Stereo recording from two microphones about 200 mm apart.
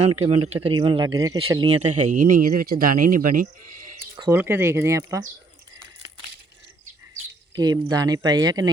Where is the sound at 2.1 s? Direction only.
45° right (ahead or behind).